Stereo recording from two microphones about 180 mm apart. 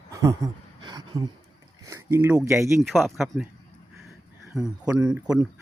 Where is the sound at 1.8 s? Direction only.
15° right (ahead or behind).